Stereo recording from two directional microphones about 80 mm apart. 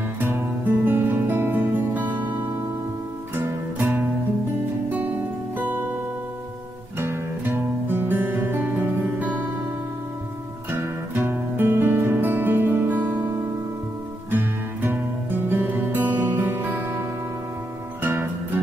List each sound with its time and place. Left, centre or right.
0.2 s music: right
7.0 s music: right
10.7 s music: right
14.3 s music: right